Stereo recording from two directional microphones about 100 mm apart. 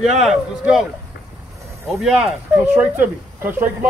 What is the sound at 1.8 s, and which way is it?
Speech, centre (ahead or behind).